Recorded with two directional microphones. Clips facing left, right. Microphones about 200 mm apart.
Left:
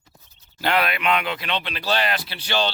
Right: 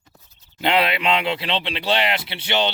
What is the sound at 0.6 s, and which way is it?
Speech, 25° right (ahead or behind).